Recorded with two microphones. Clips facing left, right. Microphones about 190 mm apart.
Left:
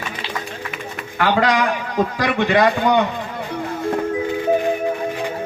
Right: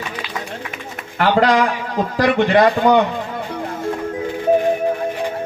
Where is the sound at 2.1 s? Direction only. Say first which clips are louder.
Right 5 dB; 50° right (ahead or behind).